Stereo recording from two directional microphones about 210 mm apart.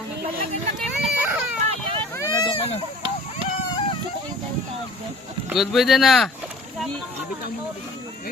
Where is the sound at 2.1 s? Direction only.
15° left (ahead or behind).